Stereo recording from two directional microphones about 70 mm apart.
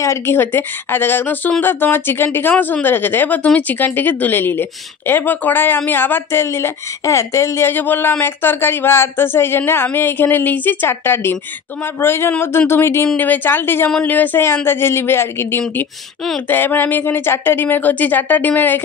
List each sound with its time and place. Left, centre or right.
0.0 s a woman's voice: left